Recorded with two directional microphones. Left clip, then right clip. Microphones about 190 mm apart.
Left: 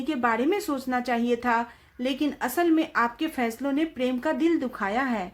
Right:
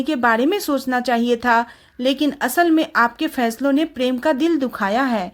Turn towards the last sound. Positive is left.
turn(degrees=-45)  # may be behind; listen again after turning